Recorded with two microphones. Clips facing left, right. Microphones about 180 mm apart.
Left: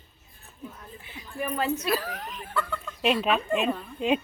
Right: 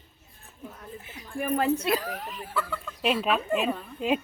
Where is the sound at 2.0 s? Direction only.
10° right (ahead or behind).